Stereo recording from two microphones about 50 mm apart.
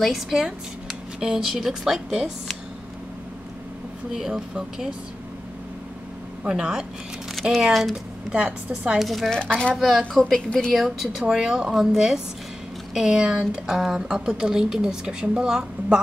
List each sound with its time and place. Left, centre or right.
0.0 s speech: centre
4.1 s speech: centre
6.4 s speech: centre
7.9 s speech: right
8.9 s a woman's voice: centre
9.3 s speech: centre
9.8 s a woman's voice: centre
10.3 s speech: centre
10.7 s a woman's voice: centre
11.2 s speech: centre
13.7 s a woman's voice: centre